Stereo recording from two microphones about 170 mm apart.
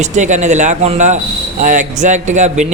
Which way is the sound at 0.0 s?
45° right (ahead or behind).